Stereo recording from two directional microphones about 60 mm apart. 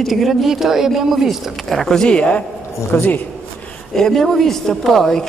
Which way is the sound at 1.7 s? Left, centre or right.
Centre.